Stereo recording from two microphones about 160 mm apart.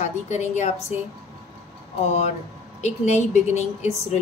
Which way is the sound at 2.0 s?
45° left (ahead or behind).